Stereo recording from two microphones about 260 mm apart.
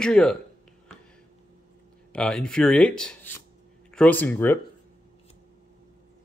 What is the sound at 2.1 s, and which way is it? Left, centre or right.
Speech, centre.